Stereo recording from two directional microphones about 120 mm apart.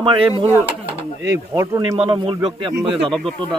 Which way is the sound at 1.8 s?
40° right (ahead or behind).